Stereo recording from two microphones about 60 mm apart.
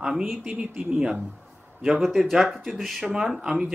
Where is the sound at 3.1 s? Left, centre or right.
Centre.